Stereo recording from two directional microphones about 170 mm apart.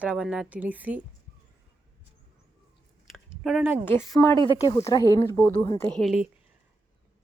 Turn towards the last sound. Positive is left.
turn(degrees=0)  # may be behind; listen again after turning